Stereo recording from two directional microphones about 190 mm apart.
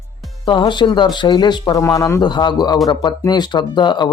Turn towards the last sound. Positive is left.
turn(degrees=25)  # may be behind; listen again after turning